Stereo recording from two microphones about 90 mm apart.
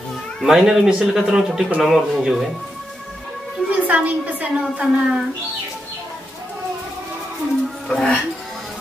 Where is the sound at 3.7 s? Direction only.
15° right (ahead or behind).